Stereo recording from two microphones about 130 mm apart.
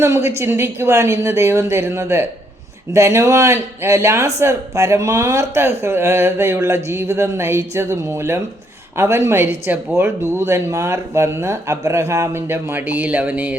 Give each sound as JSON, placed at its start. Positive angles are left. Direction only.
{"t": 0.0, "sound": "speech", "side_deg": -20}